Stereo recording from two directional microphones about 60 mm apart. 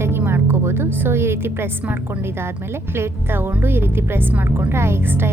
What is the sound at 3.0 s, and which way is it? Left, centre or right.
Speech, right.